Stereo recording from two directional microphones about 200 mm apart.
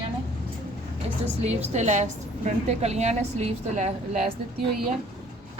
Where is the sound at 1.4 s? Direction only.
35° right (ahead or behind).